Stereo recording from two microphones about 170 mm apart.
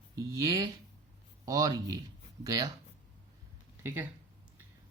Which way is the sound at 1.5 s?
20° right (ahead or behind).